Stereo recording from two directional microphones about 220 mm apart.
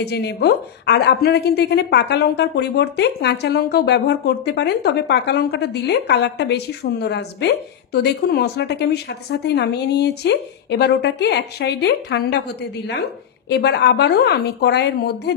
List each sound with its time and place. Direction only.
0.0 s a woman's voice: 50° left (ahead or behind)